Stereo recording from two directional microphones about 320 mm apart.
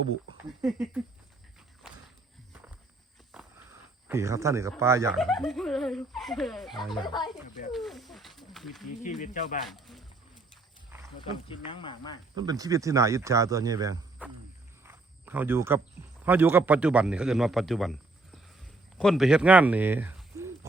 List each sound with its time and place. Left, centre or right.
0.6 s speech: centre
3.3 s a sound: centre
4.7 s speech: centre
6.9 s speech: centre
7.7 s speech: centre
9.2 s speech: left
9.6 s speech: centre
11.2 s speech: centre
12.4 s speech: centre
14.8 s cricket: centre
16.2 s speech: centre